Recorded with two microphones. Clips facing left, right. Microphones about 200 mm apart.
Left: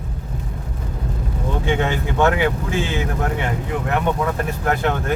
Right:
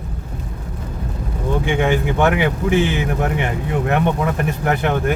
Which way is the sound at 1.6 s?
15° right (ahead or behind).